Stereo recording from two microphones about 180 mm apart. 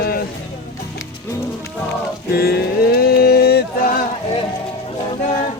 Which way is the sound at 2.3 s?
60° left (ahead or behind).